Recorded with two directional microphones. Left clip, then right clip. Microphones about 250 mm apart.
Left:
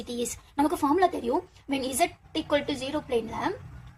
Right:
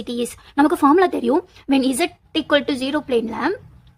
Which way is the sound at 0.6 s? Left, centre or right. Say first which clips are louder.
Right 9 dB; right.